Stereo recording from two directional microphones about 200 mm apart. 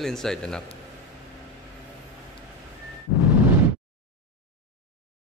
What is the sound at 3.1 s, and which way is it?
Explosion, 15° right (ahead or behind).